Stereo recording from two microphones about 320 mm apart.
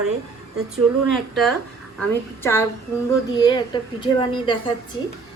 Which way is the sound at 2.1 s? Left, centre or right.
Centre.